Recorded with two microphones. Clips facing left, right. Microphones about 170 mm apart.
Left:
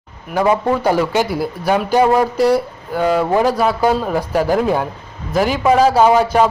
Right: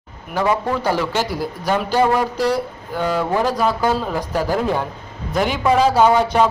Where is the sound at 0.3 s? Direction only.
20° left (ahead or behind).